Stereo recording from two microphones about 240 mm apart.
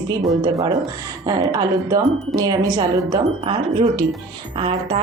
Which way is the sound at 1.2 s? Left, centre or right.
Centre.